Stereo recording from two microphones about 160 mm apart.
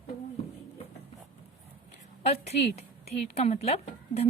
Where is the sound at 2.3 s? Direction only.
40° left (ahead or behind).